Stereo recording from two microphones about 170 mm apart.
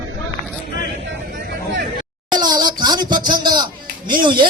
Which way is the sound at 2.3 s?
25° right (ahead or behind).